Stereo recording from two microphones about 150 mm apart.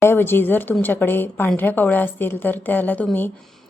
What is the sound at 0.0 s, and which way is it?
A woman's voice, 15° left (ahead or behind).